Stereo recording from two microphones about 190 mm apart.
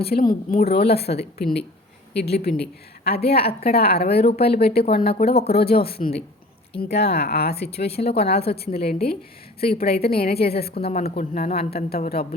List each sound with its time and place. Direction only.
0.0 s a woman's voice: 50° left (ahead or behind)
5.3 s a woman's voice: 30° left (ahead or behind)
5.5 s a woman's voice: 55° left (ahead or behind)
8.0 s a woman's voice: 30° left (ahead or behind)
8.5 s a woman's voice: 55° left (ahead or behind)
10.8 s a woman's voice: 30° left (ahead or behind)
11.5 s speech: 55° left (ahead or behind)